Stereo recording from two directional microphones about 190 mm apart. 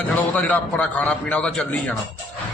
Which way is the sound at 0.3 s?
5° left (ahead or behind).